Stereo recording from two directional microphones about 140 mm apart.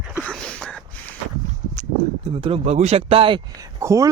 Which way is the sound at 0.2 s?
5° left (ahead or behind).